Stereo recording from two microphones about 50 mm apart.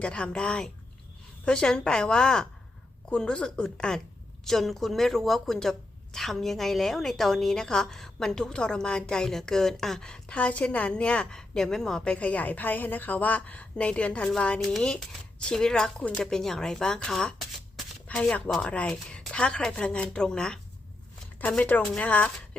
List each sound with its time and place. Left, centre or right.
0.0 s a woman's voice: left
10.3 s a woman's voice: left; by 12.1 s centre
12.1 s a woman's voice: left
21.6 s a woman's voice: left